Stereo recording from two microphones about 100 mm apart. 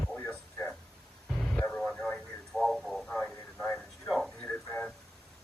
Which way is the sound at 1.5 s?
15° left (ahead or behind).